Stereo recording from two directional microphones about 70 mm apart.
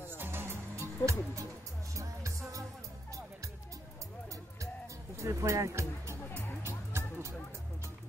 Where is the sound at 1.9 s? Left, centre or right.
Right.